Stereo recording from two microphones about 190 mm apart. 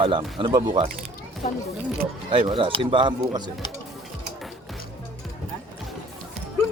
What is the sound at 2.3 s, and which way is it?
Speech, 25° right (ahead or behind).